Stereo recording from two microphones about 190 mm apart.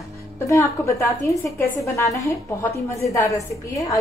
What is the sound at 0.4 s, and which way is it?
A woman's voice, 15° left (ahead or behind).